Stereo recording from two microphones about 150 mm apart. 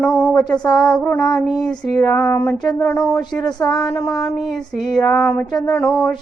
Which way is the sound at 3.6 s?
Centre (ahead or behind).